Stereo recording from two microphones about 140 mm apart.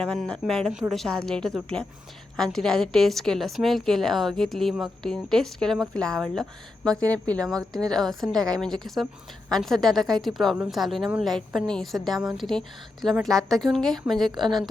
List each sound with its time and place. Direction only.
0.0 s a woman's voice: 5° left (ahead or behind)
8.4 s a woman's voice: 25° right (ahead or behind)
8.6 s a woman's voice: centre (ahead or behind)